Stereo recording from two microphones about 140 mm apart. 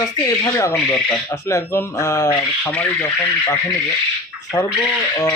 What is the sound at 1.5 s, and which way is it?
Speech, 20° left (ahead or behind).